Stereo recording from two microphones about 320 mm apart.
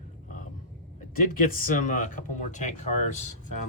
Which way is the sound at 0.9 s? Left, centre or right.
Left.